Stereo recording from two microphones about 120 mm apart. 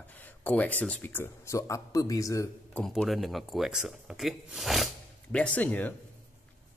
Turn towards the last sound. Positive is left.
turn(degrees=15)  # may be behind; listen again after turning